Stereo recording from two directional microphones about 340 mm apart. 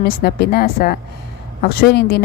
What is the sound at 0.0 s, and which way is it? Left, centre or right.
A woman's voice, left.